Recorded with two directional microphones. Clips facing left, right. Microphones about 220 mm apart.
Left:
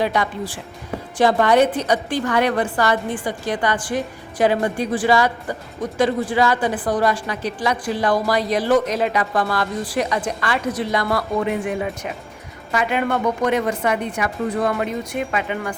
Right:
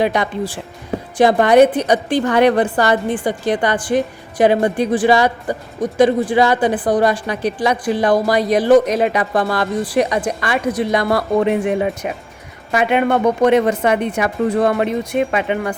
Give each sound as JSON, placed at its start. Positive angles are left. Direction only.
{"t": 0.0, "sound": "a woman's voice", "side_deg": -20}
{"t": 11.0, "sound": "a woman's voice", "side_deg": -30}